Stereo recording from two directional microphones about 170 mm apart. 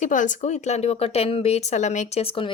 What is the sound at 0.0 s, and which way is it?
Speech, 50° left (ahead or behind).